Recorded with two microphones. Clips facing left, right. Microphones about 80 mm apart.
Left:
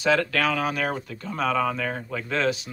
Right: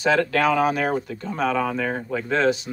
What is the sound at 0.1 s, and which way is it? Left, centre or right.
Speech, centre.